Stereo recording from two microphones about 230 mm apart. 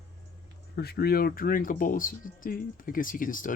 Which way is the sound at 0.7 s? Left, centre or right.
Left.